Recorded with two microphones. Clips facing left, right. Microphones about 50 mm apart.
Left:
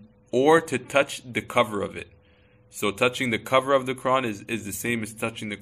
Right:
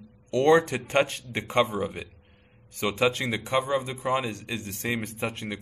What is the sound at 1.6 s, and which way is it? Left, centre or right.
Speech, left.